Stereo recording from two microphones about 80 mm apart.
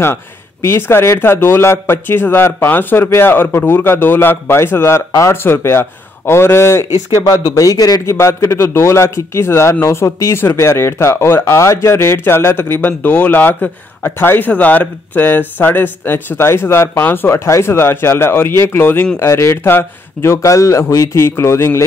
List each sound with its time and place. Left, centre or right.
0.0 s a man's voice: left
7.2 s a man's voice: left
8.2 s a man's voice: left